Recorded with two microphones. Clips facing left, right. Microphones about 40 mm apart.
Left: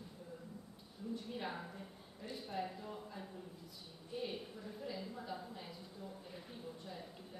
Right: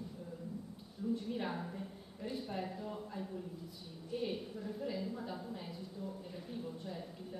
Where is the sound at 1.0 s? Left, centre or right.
Centre.